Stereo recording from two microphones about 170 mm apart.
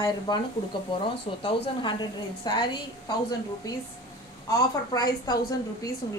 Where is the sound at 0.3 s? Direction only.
25° left (ahead or behind).